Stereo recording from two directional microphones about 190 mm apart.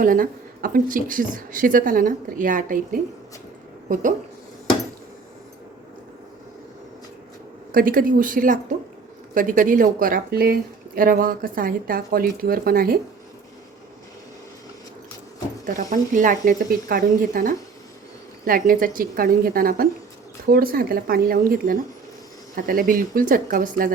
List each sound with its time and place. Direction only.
0.0 s speech: 45° right (ahead or behind)
7.7 s speech: 50° right (ahead or behind)
15.6 s speech: 45° right (ahead or behind)